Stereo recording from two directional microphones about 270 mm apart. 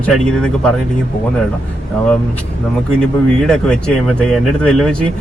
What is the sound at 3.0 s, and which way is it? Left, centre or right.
Speech, centre.